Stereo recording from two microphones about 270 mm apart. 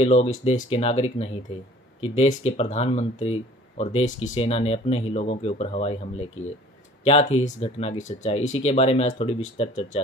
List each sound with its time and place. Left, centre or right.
0.0 s speech: left
2.5 s speech: left